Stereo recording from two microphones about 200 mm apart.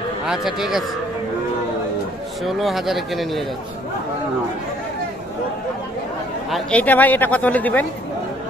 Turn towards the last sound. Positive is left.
turn(degrees=10)  # may be behind; listen again after turning